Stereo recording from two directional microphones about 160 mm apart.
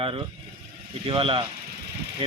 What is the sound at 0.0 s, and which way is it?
Speech, 35° right (ahead or behind).